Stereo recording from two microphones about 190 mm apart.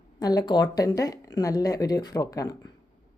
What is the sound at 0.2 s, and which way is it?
Speech, 20° left (ahead or behind).